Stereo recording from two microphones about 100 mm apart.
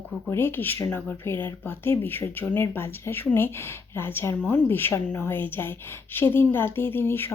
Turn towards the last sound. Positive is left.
turn(degrees=20)  # may be behind; listen again after turning